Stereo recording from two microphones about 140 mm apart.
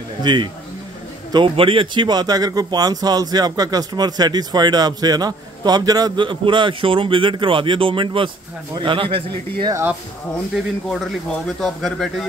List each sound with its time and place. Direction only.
0.2 s speech: 35° right (ahead or behind)
10.5 s speech: centre (ahead or behind)